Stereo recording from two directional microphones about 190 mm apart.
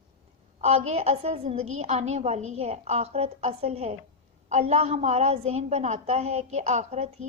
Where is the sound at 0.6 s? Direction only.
35° right (ahead or behind).